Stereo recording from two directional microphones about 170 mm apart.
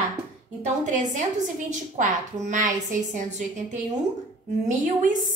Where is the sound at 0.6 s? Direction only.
45° right (ahead or behind).